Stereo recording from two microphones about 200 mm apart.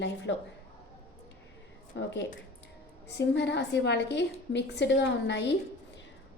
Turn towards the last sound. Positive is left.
turn(degrees=60)  # may be behind; listen again after turning